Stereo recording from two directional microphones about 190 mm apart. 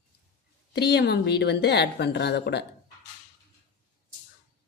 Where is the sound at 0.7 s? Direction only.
60° left (ahead or behind).